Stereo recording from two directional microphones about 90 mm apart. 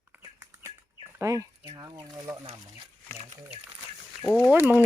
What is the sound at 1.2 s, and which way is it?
A woman's voice, 35° right (ahead or behind).